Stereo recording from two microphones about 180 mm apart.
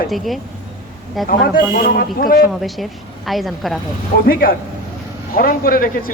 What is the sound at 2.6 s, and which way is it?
A woman's voice, centre (ahead or behind).